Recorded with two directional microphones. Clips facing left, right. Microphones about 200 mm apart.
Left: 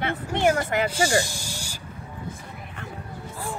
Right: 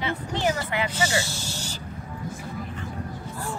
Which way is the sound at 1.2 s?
15° left (ahead or behind).